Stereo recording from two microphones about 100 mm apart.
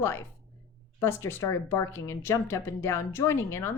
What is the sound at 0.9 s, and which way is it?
Speech, 25° left (ahead or behind).